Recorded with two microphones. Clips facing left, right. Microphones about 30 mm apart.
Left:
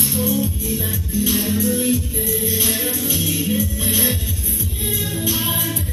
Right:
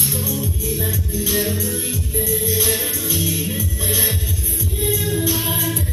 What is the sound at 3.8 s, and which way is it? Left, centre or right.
Music, left.